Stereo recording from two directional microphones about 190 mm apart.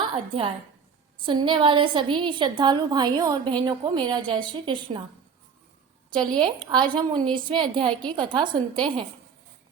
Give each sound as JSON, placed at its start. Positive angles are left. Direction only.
{"t": 0.0, "sound": "a woman's voice", "side_deg": -30}
{"t": 6.1, "sound": "a woman's voice", "side_deg": 5}
{"t": 6.4, "sound": "a woman's voice", "side_deg": -25}